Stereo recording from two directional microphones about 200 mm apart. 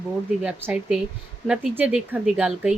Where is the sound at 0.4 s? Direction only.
5° right (ahead or behind).